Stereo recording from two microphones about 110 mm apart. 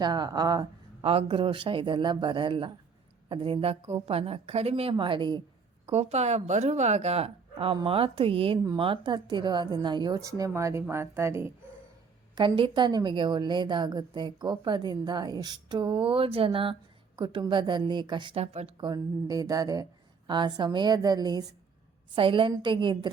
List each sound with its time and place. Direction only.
0.0 s speech: 40° right (ahead or behind)
1.0 s a woman's voice: 55° right (ahead or behind)
5.8 s a woman's voice: 75° right (ahead or behind); by 8.5 s 60° right (ahead or behind)
8.8 s a woman's voice: 45° right (ahead or behind); by 11.5 s 25° right (ahead or behind)
12.3 s a woman's voice: 45° right (ahead or behind)
18.3 s a woman's voice: 70° right (ahead or behind)
18.8 s speech: 35° right (ahead or behind)
22.1 s a woman's voice: 50° right (ahead or behind)